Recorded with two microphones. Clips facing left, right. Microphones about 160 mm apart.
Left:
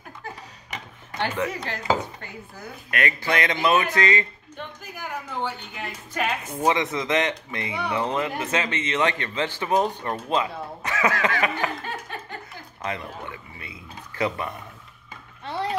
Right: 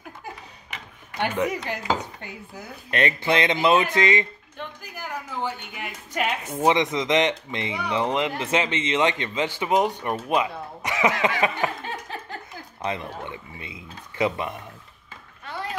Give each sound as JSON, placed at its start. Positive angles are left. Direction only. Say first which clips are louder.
{"t": 1.2, "sound": "speech", "louder": "right 2 dB", "side_deg": -15}
{"t": 2.9, "sound": "a man's voice", "louder": "right 3 dB", "side_deg": -25}
{"t": 4.6, "sound": "speech", "louder": "even", "side_deg": -5}
{"t": 6.1, "sound": "a man's voice", "louder": "right 1 dB", "side_deg": -20}
{"t": 10.8, "sound": "a sound", "louder": "right 2 dB", "side_deg": -20}
{"t": 12.8, "sound": "a man's voice", "louder": "right 2 dB", "side_deg": -20}
{"t": 15.4, "sound": "a sound", "louder": "left 5 dB", "side_deg": 30}